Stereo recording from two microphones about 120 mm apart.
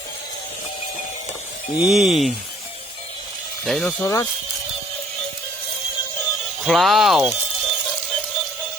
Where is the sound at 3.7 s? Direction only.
5° left (ahead or behind).